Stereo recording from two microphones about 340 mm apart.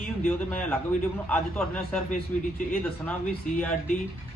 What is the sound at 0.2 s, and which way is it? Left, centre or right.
A man's voice, centre.